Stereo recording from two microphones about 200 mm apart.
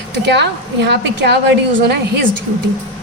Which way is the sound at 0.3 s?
60° right (ahead or behind).